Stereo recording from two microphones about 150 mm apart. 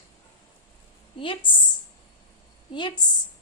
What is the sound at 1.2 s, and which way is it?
Speech, 35° left (ahead or behind).